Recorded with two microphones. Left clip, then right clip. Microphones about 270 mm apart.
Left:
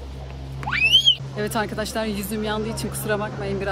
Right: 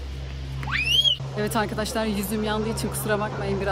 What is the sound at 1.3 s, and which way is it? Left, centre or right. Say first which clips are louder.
Speech: even; centre.